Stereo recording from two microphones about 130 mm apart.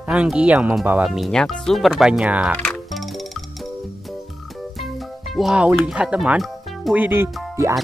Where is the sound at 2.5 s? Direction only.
10° left (ahead or behind).